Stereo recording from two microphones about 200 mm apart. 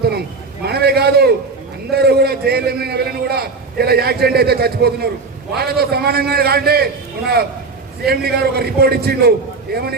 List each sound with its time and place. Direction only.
0.6 s a sound: 50° right (ahead or behind)
1.9 s a man's voice: 50° right (ahead or behind)
8.0 s a man's voice: 50° right (ahead or behind)